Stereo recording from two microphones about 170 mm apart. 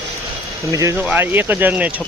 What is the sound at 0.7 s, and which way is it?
Speech, 20° right (ahead or behind).